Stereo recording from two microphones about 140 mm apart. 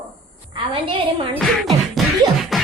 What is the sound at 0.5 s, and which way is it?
Speech, 40° right (ahead or behind).